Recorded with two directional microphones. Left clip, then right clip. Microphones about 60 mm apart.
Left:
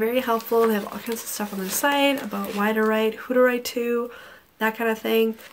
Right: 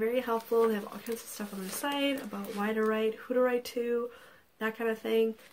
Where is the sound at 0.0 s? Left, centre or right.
Centre.